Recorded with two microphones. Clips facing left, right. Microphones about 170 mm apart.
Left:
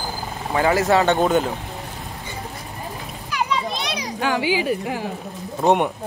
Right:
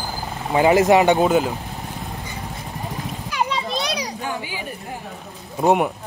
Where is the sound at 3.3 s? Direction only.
35° right (ahead or behind).